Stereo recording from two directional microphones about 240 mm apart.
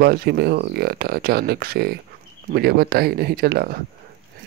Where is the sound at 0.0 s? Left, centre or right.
Right.